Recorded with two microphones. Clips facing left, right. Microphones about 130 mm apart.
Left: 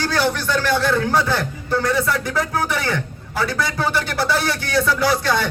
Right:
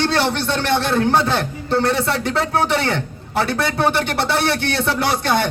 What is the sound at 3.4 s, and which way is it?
A man's voice, 65° right (ahead or behind).